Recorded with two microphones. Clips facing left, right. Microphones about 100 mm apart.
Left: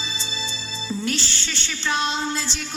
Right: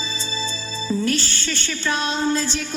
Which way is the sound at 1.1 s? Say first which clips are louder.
Right 4 dB; 50° right (ahead or behind).